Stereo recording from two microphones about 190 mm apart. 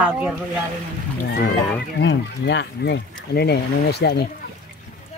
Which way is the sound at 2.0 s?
70° left (ahead or behind).